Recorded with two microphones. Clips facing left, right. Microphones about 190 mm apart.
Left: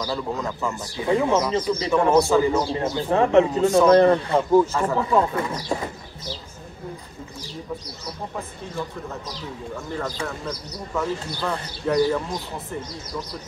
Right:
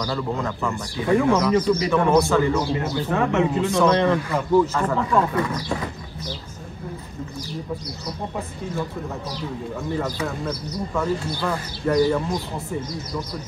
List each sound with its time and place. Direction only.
0.0 s speech: 15° left (ahead or behind)
2.2 s a man's voice: 15° left (ahead or behind)
2.7 s a man's voice: 30° left (ahead or behind)
4.7 s a man's voice: 5° left (ahead or behind)
5.3 s speech: 25° left (ahead or behind)
9.9 s speech: 5° right (ahead or behind)